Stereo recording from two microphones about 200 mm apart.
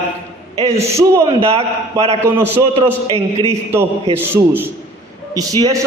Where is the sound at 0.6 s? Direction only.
30° right (ahead or behind).